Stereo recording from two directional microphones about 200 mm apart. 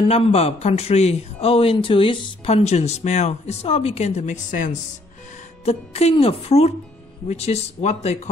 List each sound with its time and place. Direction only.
0.1 s speech: 30° left (ahead or behind)